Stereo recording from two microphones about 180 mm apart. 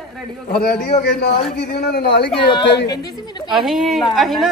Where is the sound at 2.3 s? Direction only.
25° left (ahead or behind).